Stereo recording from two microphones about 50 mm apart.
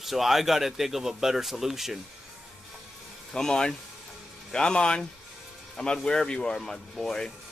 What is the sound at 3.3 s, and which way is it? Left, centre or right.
Speech, centre.